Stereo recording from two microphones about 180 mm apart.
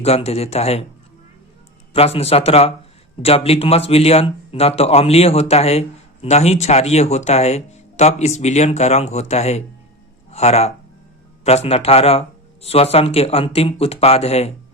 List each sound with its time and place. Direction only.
0.0 s speech: 35° left (ahead or behind)
1.9 s speech: 35° left (ahead or behind)